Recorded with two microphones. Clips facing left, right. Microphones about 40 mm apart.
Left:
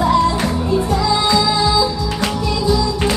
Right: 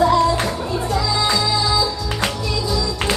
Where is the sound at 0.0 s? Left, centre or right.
Centre.